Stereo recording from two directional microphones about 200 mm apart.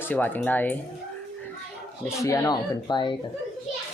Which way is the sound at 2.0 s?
15° left (ahead or behind).